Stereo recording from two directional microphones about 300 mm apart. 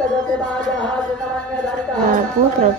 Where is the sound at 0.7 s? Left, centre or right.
Centre.